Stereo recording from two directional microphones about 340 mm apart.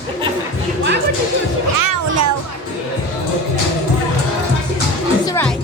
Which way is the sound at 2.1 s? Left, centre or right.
Right.